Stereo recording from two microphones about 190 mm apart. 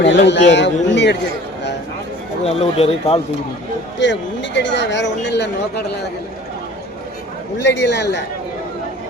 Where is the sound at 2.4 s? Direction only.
30° left (ahead or behind).